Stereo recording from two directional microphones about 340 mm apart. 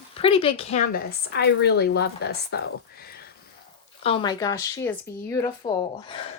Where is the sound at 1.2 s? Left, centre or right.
Left.